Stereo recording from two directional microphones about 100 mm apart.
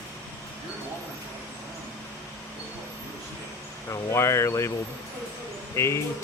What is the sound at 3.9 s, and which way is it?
Speech, 30° left (ahead or behind).